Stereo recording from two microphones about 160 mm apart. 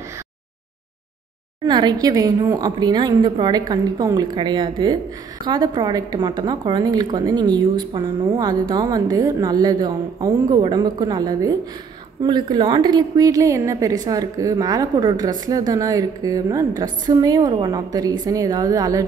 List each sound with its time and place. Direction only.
1.7 s a woman's voice: 25° right (ahead or behind)